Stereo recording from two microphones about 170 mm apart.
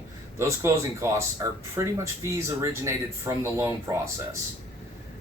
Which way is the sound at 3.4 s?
15° right (ahead or behind).